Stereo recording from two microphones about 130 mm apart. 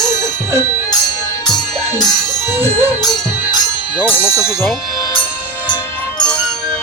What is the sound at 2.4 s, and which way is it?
Music, 15° right (ahead or behind).